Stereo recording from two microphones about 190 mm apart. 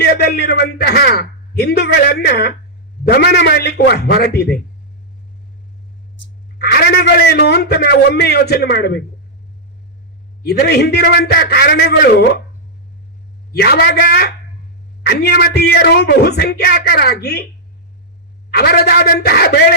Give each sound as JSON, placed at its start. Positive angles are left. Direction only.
{"t": 0.0, "sound": "a man's voice", "side_deg": 55}
{"t": 6.6, "sound": "a man's voice", "side_deg": 55}
{"t": 10.4, "sound": "a man's voice", "side_deg": 55}
{"t": 13.5, "sound": "a man's voice", "side_deg": 60}
{"t": 18.5, "sound": "a man's voice", "side_deg": 55}